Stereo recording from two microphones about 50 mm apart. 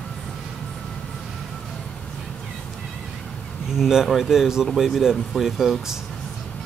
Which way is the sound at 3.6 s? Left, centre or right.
Centre.